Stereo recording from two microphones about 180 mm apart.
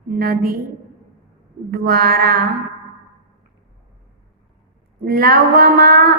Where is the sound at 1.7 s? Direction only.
55° right (ahead or behind).